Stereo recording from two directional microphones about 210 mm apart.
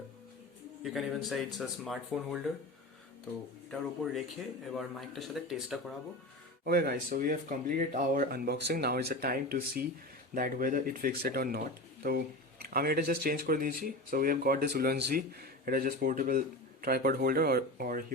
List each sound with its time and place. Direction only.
0.9 s speech: centre (ahead or behind)
3.7 s speech: centre (ahead or behind)
6.7 s speech: 50° right (ahead or behind)